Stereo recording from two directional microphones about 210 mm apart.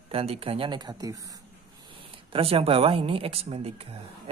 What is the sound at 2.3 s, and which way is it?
A woman's voice, 25° right (ahead or behind).